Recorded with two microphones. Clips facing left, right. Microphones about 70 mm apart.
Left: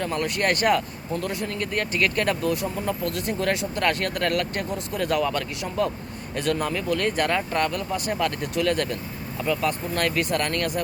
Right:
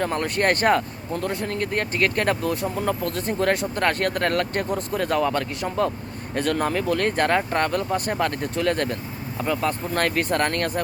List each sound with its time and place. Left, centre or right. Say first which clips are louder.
0.0 s speech: right 2 dB; right